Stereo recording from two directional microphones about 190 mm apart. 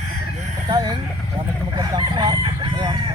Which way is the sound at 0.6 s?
20° right (ahead or behind).